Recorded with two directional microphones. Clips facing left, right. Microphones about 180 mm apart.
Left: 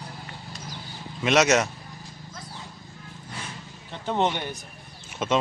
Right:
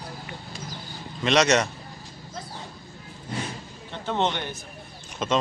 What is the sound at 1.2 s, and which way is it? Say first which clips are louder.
Speech: even; 5° left (ahead or behind).